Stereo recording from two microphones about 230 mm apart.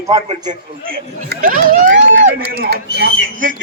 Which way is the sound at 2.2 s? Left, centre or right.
Right.